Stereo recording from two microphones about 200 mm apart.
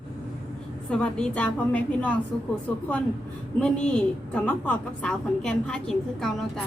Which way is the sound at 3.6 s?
5° left (ahead or behind).